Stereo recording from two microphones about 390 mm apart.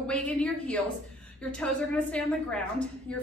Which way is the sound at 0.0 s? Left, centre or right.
Centre.